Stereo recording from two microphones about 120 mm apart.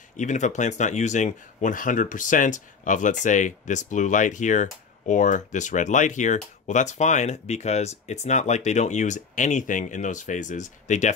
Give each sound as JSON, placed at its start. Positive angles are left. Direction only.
{"t": 0.2, "sound": "speech", "side_deg": 85}